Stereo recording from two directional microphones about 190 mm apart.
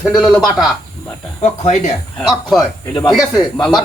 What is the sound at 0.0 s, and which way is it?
Speech, centre (ahead or behind).